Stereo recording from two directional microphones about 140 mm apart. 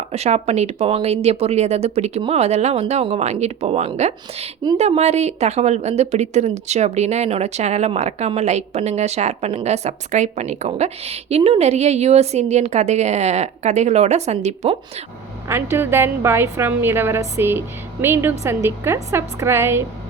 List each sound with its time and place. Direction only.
0.1 s a woman's voice: 50° right (ahead or behind)
15.4 s a woman's voice: 15° right (ahead or behind)